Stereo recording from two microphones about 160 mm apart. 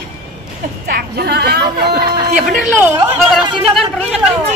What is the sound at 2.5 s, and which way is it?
A woman's voice, 10° right (ahead or behind).